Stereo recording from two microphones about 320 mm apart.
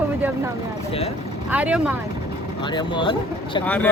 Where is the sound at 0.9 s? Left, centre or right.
Centre.